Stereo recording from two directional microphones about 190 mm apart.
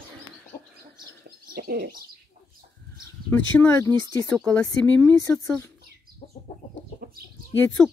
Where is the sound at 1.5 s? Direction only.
55° right (ahead or behind).